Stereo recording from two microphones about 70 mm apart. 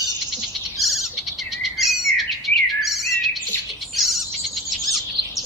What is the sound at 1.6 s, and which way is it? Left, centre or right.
Bird, centre.